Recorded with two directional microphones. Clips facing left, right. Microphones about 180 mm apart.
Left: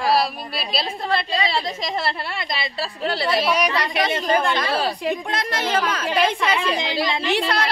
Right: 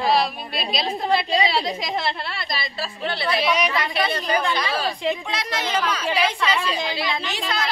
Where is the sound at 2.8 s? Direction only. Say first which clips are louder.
Left 3 dB; 35° left (ahead or behind).